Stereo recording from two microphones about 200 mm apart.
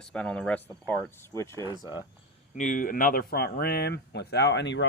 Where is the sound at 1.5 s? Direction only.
20° right (ahead or behind).